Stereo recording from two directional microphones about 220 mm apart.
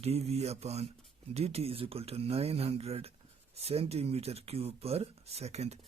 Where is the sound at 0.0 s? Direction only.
30° right (ahead or behind).